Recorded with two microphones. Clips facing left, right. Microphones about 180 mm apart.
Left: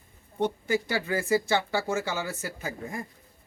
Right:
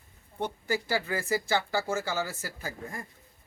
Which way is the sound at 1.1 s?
25° left (ahead or behind).